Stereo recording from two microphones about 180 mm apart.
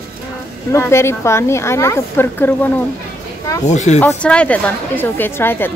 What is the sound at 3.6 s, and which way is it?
Speech, 40° left (ahead or behind).